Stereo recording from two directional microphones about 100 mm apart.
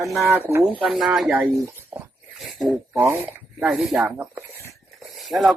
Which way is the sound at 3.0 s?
20° right (ahead or behind).